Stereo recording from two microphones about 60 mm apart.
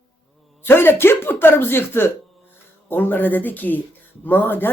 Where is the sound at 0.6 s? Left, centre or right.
Left.